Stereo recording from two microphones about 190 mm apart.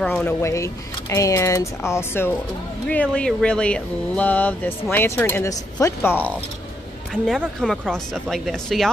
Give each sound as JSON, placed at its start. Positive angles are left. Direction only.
{"t": 0.0, "sound": "speech", "side_deg": 5}